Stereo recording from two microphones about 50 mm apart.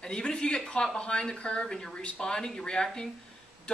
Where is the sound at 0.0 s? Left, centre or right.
Centre.